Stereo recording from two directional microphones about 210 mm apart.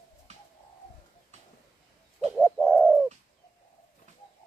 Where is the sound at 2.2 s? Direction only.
5° right (ahead or behind).